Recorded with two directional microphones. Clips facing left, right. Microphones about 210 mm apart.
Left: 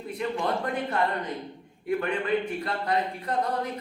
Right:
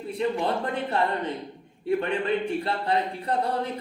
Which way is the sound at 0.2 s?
30° right (ahead or behind).